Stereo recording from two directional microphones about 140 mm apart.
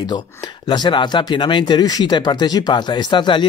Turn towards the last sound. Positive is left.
turn(degrees=35)  # may be behind; listen again after turning